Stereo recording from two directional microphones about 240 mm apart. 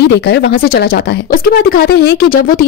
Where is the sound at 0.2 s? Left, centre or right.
Left.